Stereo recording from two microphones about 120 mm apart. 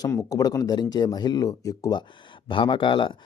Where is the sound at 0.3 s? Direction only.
30° left (ahead or behind).